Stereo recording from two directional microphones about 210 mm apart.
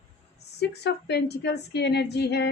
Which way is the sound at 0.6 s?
50° left (ahead or behind).